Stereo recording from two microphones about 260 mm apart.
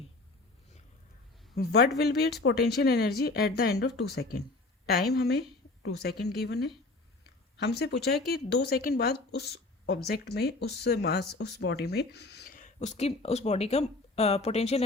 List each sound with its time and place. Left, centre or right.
1.5 s speech: left